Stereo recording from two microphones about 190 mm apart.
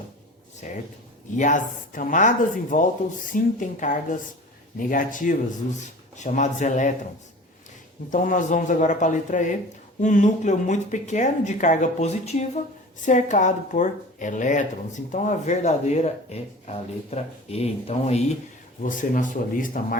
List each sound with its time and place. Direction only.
0.6 s speech: 40° left (ahead or behind)
8.1 s speech: 45° left (ahead or behind)